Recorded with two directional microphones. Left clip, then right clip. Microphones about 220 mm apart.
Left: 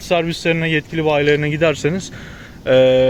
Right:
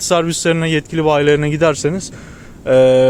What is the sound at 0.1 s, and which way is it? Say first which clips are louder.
Speech: right 2 dB; 20° right (ahead or behind).